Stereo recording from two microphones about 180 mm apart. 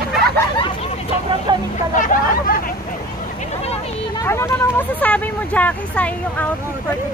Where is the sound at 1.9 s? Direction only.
50° left (ahead or behind).